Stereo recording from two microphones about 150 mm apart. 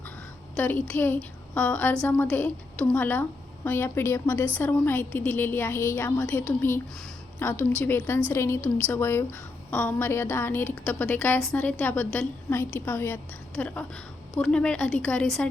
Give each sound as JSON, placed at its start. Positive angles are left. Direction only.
{"t": 0.5, "sound": "a woman's voice", "side_deg": 10}